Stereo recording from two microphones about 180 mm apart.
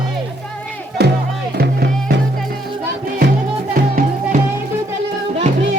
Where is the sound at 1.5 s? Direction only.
65° right (ahead or behind).